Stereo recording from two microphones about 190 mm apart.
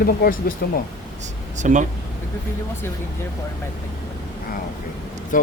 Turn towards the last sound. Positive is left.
turn(degrees=45)  # may be behind; listen again after turning